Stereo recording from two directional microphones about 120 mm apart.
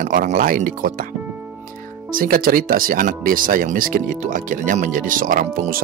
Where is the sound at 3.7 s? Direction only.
90° right.